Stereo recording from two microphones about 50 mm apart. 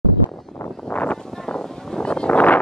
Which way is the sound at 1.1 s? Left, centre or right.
Centre.